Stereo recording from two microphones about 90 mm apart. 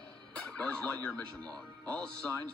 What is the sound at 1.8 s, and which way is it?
Speech, 15° left (ahead or behind).